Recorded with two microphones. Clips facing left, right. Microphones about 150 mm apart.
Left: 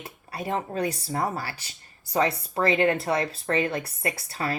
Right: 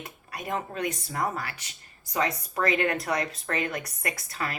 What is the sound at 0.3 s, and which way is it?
Speech, 30° left (ahead or behind).